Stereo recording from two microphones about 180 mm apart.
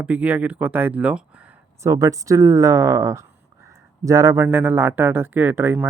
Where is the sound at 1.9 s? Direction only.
20° right (ahead or behind).